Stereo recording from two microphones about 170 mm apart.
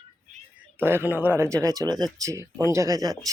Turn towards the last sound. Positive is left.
turn(degrees=-20)  # may be behind; listen again after turning